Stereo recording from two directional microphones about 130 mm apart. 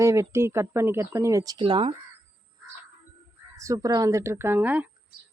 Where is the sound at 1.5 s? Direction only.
40° right (ahead or behind).